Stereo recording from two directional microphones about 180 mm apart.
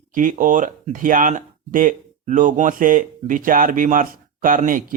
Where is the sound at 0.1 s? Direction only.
45° right (ahead or behind).